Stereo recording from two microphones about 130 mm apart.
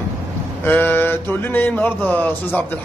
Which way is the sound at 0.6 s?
15° left (ahead or behind).